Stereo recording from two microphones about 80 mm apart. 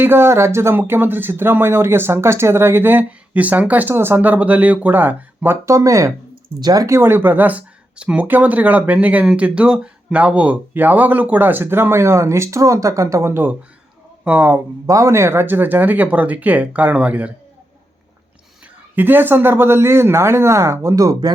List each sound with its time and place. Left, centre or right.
0.0 s speech: right
5.6 s speech: right
6.3 s a sound: right
6.8 s speech: right
14.3 s speech: right
14.8 s speech: right; by 17.3 s centre
18.9 s speech: right